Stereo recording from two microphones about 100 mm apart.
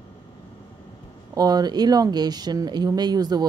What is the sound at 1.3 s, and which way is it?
A woman's voice, 40° right (ahead or behind).